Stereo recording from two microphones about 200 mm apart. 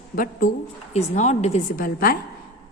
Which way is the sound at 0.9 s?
35° left (ahead or behind).